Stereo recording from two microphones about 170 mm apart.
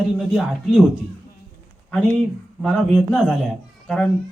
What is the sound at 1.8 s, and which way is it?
A man's voice, 5° left (ahead or behind).